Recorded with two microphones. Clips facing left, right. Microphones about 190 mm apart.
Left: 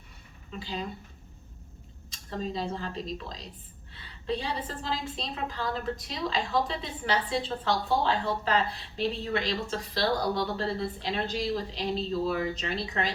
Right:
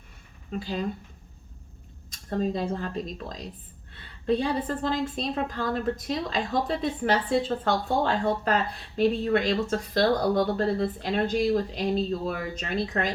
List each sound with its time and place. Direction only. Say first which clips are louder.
0.5 s a woman's voice: right 5 dB; 50° right (ahead or behind)
2.3 s a woman's voice: right 5 dB; 50° right (ahead or behind)